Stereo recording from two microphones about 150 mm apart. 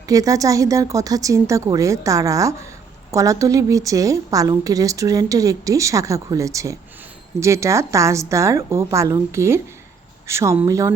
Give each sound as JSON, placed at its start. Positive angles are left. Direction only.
{"t": 0.0, "sound": "a woman's voice", "side_deg": -25}